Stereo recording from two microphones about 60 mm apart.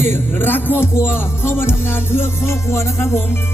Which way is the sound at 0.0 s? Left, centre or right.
Left.